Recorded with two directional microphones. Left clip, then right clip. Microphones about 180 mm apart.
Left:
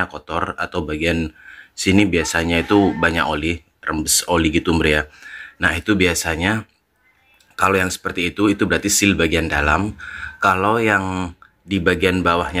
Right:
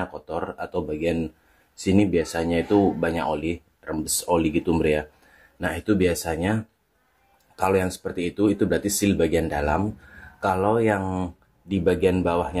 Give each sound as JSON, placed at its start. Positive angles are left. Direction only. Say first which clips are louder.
{"t": 0.1, "sound": "speech", "louder": "left 7 dB", "side_deg": 10}